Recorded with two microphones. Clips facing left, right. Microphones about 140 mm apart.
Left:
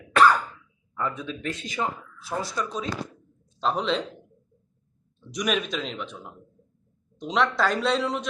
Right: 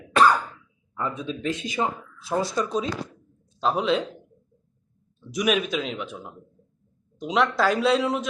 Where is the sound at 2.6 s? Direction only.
25° right (ahead or behind).